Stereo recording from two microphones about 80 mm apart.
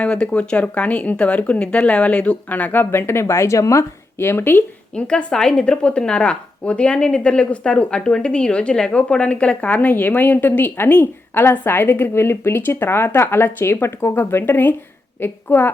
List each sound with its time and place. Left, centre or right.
0.0 s speech: centre; by 4.6 s left
4.9 s speech: centre; by 15.7 s left